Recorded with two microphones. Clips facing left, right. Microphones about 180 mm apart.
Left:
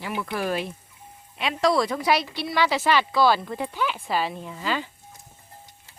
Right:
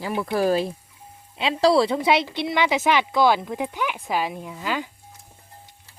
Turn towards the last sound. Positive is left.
turn(degrees=-10)  # may be behind; listen again after turning